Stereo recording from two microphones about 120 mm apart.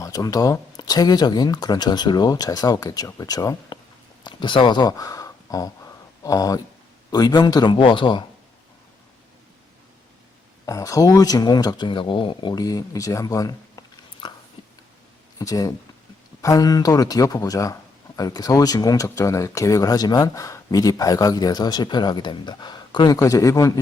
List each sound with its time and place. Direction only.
0.0 s a man's voice: 30° left (ahead or behind)
10.7 s speech: 25° left (ahead or behind)
14.6 s a sound: 50° left (ahead or behind)
15.4 s a man's voice: 30° left (ahead or behind)
23.1 s a man's voice: 25° left (ahead or behind)